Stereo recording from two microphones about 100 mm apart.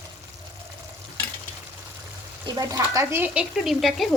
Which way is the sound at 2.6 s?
35° right (ahead or behind).